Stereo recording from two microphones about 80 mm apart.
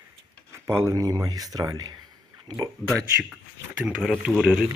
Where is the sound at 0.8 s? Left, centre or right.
Right.